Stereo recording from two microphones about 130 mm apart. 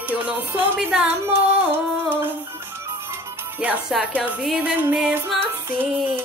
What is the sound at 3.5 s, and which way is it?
Music, 10° right (ahead or behind).